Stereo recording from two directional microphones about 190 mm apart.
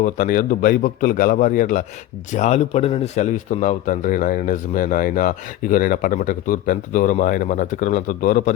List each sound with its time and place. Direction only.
0.0 s a man's voice: 45° left (ahead or behind)